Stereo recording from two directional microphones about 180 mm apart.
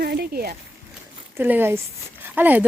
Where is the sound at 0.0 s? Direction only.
60° right (ahead or behind).